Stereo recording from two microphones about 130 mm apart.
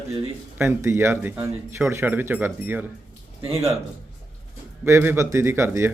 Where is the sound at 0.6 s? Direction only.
20° right (ahead or behind).